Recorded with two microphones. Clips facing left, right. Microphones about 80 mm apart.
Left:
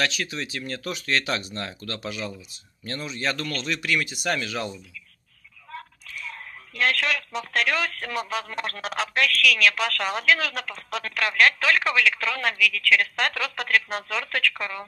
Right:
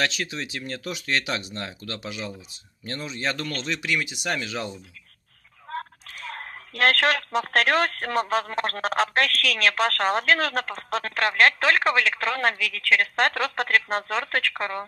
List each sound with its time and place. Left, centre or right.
0.0 s speech: right
5.7 s speech: right